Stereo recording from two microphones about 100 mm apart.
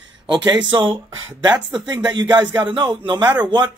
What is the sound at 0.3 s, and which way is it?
Speech, 50° right (ahead or behind).